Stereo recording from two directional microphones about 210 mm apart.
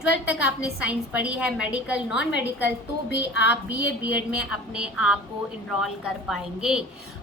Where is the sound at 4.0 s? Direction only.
5° right (ahead or behind).